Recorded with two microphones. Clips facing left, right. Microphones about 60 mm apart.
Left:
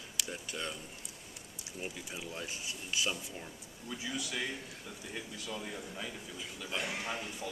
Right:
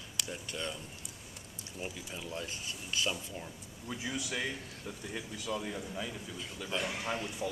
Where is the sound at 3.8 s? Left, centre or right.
Right.